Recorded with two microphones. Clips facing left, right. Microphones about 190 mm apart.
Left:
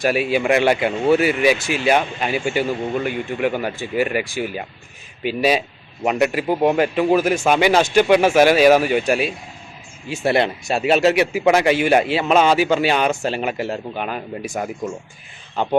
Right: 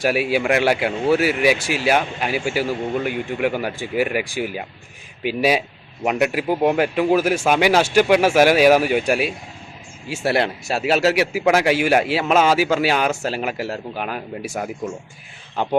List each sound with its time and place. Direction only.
0.0 s a man's voice: 10° right (ahead or behind)